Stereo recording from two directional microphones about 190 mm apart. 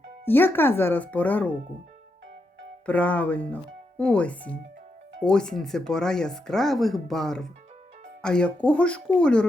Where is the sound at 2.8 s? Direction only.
10° left (ahead or behind).